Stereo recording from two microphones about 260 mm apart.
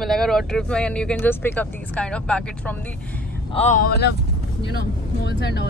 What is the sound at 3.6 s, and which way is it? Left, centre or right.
Speech, left.